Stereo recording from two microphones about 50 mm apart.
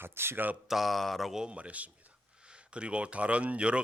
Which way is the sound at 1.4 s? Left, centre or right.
Right.